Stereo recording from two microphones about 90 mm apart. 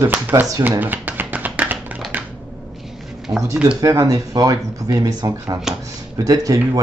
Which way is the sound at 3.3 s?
40° right (ahead or behind).